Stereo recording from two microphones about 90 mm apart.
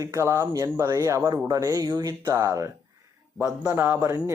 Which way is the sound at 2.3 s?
35° right (ahead or behind).